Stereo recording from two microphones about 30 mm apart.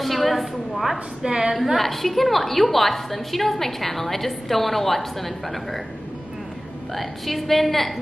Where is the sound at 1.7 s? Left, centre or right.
Centre.